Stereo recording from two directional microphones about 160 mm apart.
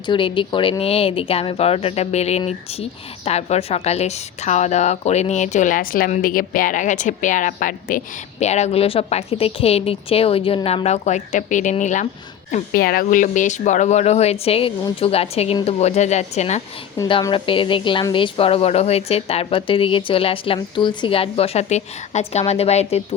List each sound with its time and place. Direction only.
0.0 s a woman's voice: 30° left (ahead or behind); by 12.0 s 50° left (ahead or behind)
12.5 s a woman's voice: 60° left (ahead or behind); by 16.6 s 45° left (ahead or behind)
17.1 s speech: 30° left (ahead or behind)